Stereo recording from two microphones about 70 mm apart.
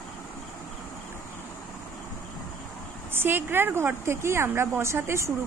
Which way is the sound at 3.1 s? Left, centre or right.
Right.